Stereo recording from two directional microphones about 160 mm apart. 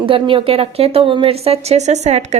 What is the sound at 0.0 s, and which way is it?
A woman's voice, 35° right (ahead or behind).